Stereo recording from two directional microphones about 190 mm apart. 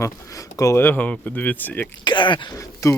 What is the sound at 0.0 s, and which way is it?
Speech, 15° left (ahead or behind).